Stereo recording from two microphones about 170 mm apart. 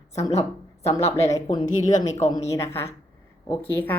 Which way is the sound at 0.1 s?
20° left (ahead or behind).